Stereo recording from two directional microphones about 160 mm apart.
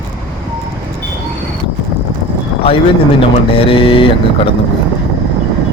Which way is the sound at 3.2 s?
35° left (ahead or behind).